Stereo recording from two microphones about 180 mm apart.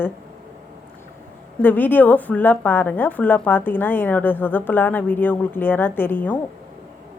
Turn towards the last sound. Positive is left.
turn(degrees=10)  # may be behind; listen again after turning